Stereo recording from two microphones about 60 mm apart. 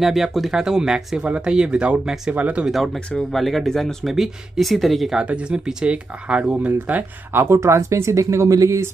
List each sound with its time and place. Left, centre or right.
0.0 s speech: centre
2.3 s speech: right
2.7 s speech: centre
5.1 s speech: centre
7.3 s speech: right